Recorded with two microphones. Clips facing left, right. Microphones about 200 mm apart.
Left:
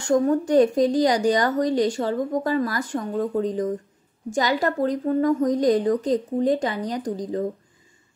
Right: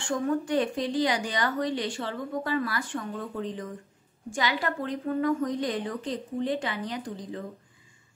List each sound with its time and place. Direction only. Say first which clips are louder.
0.0 s speech: left 8 dB; 40° left (ahead or behind)